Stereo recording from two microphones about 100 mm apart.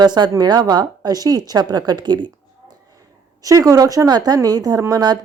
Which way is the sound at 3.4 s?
35° right (ahead or behind).